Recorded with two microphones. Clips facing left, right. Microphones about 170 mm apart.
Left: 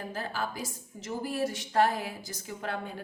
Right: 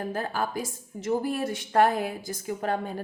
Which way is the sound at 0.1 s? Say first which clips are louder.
Right 5 dB; 50° right (ahead or behind).